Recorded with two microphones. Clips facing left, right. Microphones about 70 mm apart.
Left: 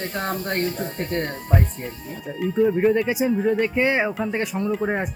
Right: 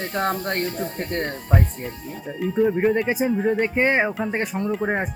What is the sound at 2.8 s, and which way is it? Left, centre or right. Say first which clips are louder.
Speech: left 1 dB; right.